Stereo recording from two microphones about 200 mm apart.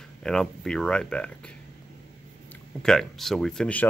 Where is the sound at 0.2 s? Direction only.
5° left (ahead or behind).